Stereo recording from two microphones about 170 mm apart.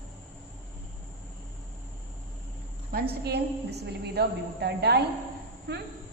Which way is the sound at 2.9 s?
65° right (ahead or behind).